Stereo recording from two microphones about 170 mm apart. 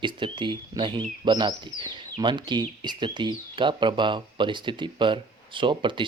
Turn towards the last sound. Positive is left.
turn(degrees=-30)  # may be behind; listen again after turning